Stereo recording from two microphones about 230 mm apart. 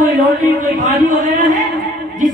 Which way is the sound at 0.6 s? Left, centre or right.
Right.